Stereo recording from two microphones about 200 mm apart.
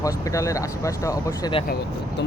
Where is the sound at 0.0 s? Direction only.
15° left (ahead or behind).